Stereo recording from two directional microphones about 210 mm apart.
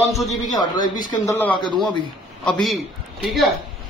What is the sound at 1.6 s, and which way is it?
Speech, 20° left (ahead or behind).